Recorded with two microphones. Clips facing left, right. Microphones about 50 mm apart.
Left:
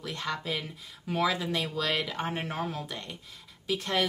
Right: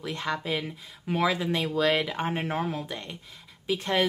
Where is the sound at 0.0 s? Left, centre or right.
Right.